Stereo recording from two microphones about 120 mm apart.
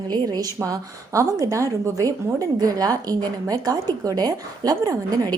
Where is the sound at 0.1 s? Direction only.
35° right (ahead or behind).